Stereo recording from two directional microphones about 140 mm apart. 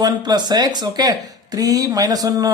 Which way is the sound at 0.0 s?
30° right (ahead or behind).